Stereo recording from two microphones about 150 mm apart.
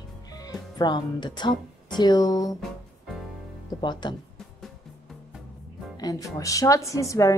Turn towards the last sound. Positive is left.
turn(degrees=20)  # may be behind; listen again after turning